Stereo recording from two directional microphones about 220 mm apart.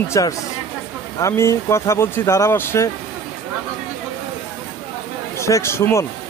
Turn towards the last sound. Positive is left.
turn(degrees=10)  # may be behind; listen again after turning